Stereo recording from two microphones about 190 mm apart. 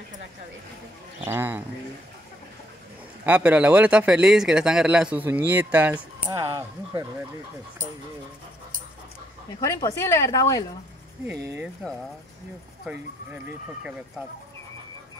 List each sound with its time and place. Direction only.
1.2 s speech: 10° right (ahead or behind)
3.3 s speech: 5° right (ahead or behind)
9.7 s a woman's voice: 15° left (ahead or behind)
11.2 s speech: 10° right (ahead or behind)